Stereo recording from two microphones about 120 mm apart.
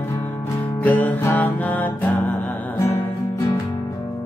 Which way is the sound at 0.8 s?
15° left (ahead or behind).